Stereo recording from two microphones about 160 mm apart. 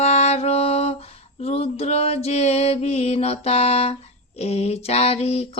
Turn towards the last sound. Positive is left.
turn(degrees=40)  # may be behind; listen again after turning